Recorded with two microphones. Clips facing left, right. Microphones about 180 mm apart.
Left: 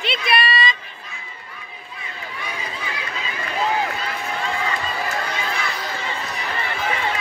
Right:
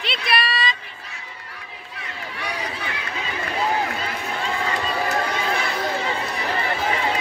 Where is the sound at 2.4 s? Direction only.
65° right (ahead or behind).